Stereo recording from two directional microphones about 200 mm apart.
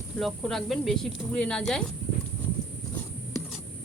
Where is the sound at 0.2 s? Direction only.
Centre (ahead or behind).